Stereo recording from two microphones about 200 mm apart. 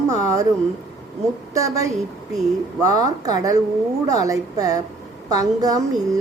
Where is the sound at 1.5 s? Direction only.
15° right (ahead or behind).